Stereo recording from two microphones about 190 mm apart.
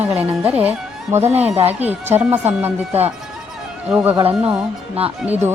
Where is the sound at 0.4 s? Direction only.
5° right (ahead or behind).